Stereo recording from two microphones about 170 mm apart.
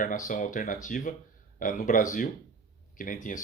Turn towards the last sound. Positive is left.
turn(degrees=50)  # may be behind; listen again after turning